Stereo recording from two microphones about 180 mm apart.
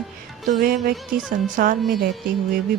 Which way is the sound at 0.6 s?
55° right (ahead or behind).